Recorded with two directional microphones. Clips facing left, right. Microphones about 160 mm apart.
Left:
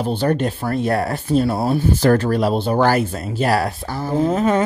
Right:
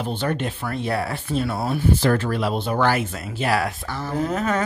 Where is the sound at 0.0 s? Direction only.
35° left (ahead or behind).